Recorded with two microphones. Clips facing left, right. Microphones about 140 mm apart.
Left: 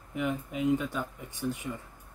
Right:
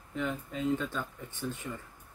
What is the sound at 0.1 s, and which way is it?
Speech, 15° left (ahead or behind).